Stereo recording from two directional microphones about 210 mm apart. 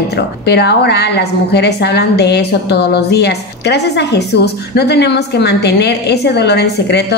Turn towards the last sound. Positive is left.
turn(degrees=55)  # may be behind; listen again after turning